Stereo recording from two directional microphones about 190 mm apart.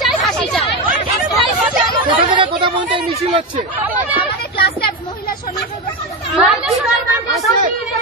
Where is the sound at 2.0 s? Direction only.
25° right (ahead or behind).